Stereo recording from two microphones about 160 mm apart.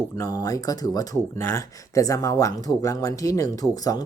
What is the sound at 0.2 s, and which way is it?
Speech, 20° left (ahead or behind).